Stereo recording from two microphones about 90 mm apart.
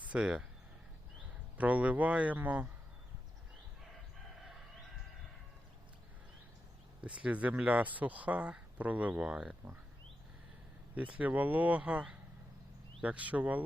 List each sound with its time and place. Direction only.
0.1 s speech: 10° right (ahead or behind)
1.5 s speech: 15° right (ahead or behind)
7.0 s speech: 15° right (ahead or behind)
10.9 s speech: 15° right (ahead or behind)